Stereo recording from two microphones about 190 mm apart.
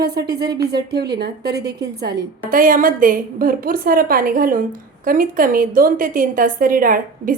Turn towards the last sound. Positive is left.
turn(degrees=-45)  # may be behind; listen again after turning